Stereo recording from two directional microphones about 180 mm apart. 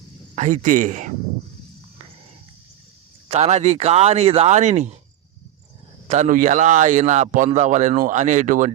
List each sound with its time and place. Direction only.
0.3 s speech: 45° right (ahead or behind)
3.2 s speech: 35° right (ahead or behind)
6.1 s speech: 45° right (ahead or behind)